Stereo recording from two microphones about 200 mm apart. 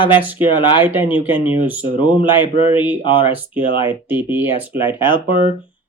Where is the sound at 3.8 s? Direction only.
10° right (ahead or behind).